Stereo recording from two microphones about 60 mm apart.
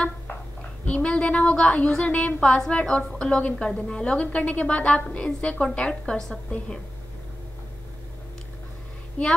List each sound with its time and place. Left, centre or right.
0.8 s a woman's voice: centre